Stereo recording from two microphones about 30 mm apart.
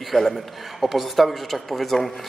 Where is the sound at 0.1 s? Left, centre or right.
Left.